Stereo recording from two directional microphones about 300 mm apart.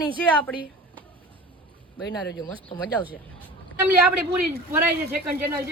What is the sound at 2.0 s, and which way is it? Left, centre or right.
Speech, left.